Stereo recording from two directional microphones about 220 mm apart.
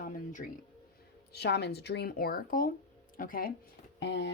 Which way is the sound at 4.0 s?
50° left (ahead or behind).